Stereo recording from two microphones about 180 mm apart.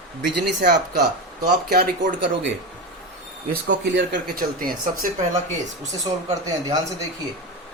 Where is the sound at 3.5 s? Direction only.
75° right (ahead or behind).